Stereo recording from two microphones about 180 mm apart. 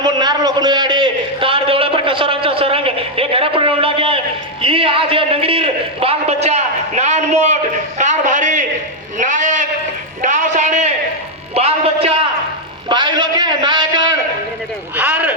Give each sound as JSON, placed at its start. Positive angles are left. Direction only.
{"t": 0.0, "sound": "a man's voice", "side_deg": -25}
{"t": 14.9, "sound": "speech", "side_deg": -10}